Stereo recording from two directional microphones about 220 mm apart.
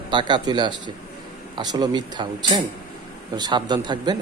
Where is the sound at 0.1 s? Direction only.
20° right (ahead or behind).